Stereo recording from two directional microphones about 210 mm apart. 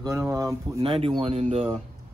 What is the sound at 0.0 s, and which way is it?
Speech, 15° right (ahead or behind).